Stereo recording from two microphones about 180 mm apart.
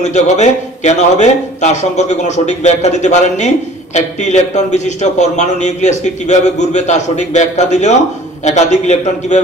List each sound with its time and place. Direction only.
0.0 s a man's voice: 40° left (ahead or behind)